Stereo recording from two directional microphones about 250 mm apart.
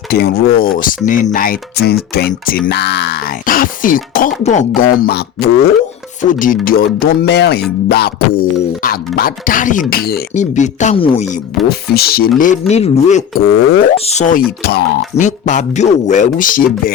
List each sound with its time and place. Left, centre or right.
0.1 s speech: left
11.7 s speech: left